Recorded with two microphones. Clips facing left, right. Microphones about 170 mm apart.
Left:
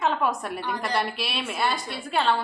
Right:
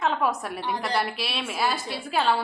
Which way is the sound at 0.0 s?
Centre (ahead or behind).